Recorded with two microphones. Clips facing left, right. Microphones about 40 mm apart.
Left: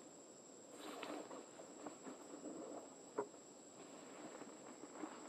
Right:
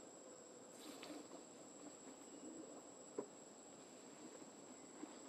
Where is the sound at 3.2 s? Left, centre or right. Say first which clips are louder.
Left 5 dB; left.